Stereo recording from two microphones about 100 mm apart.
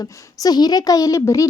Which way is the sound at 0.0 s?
40° left (ahead or behind).